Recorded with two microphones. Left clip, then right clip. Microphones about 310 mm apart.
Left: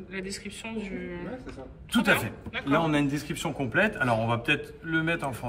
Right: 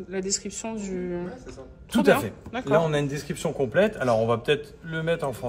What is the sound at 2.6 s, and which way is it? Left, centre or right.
A man's voice, right.